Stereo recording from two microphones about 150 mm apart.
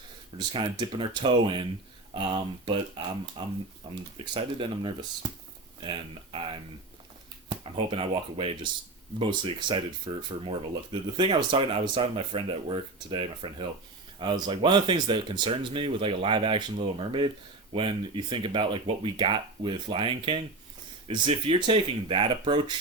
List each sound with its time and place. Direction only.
0.5 s speech: 35° right (ahead or behind)